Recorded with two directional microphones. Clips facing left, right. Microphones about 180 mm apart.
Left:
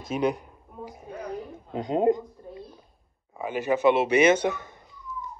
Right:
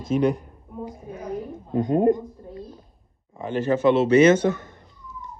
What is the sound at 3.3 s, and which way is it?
Speech, 10° left (ahead or behind).